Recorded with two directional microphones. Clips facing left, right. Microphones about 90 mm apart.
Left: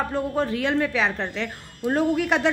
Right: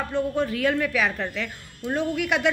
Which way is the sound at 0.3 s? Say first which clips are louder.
Even; 30° left (ahead or behind).